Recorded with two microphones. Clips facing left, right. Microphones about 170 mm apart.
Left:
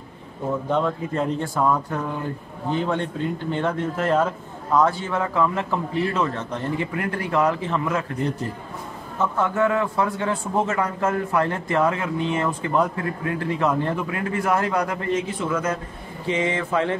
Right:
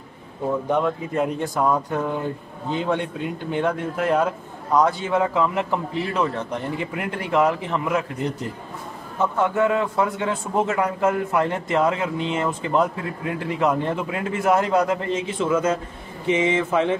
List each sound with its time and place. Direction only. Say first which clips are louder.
0.7 s a man's voice: left 1 dB; 15° right (ahead or behind)